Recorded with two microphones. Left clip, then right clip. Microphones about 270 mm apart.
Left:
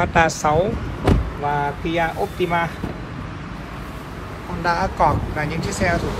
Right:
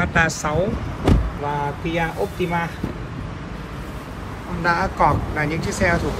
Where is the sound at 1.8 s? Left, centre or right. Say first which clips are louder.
Left 2 dB; left.